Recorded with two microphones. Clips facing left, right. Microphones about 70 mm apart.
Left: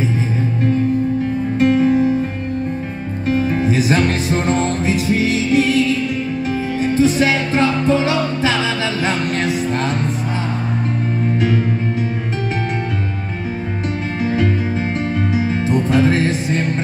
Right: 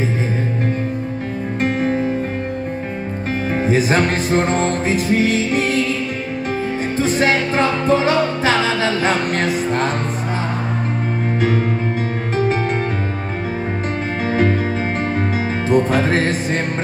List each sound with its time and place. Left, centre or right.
1.6 s music: right
3.3 s music: right
7.0 s music: right
11.3 s music: right
14.2 s music: right